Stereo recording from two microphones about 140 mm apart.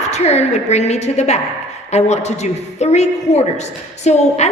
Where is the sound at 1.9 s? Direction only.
55° left (ahead or behind).